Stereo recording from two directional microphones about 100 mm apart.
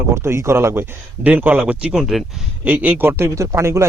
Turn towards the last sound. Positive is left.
turn(degrees=-30)  # may be behind; listen again after turning